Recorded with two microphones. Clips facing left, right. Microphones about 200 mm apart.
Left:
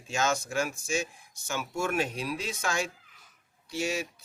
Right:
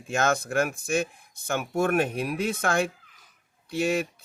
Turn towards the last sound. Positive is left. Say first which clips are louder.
# right 6 dB
turn(degrees=-55)  # may be behind; listen again after turning